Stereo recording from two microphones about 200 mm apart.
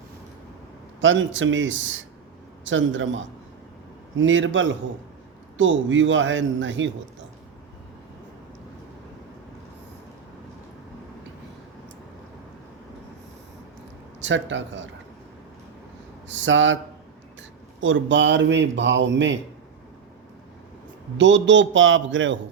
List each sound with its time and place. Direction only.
1.0 s a man's voice: 70° right (ahead or behind)
14.2 s a man's voice: 65° right (ahead or behind)
16.3 s speech: 70° right (ahead or behind)
17.7 s a man's voice: 75° right (ahead or behind)
21.2 s a man's voice: 65° right (ahead or behind)